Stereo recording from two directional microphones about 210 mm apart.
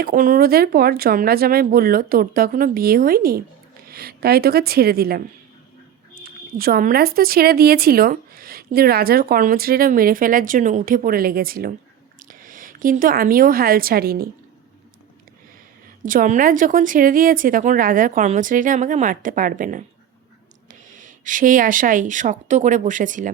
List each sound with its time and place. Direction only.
0.0 s speech: 40° right (ahead or behind)
6.2 s a woman's voice: 45° right (ahead or behind)
16.0 s a woman's voice: 40° right (ahead or behind)